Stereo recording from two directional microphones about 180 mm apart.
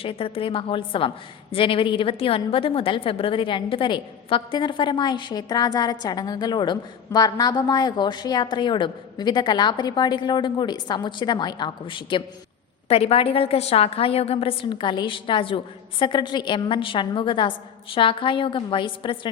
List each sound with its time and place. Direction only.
0.0 s a woman's voice: 30° left (ahead or behind)